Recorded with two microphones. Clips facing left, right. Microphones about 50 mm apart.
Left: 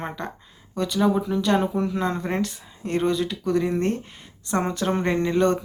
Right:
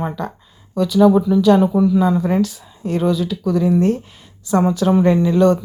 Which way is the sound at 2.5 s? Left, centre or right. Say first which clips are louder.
Right 4 dB; left.